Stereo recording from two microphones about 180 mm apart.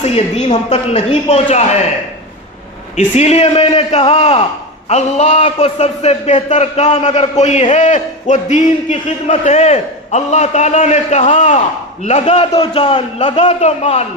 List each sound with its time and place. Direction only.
0.0 s a man's voice: 35° left (ahead or behind)
2.9 s a man's voice: 40° left (ahead or behind)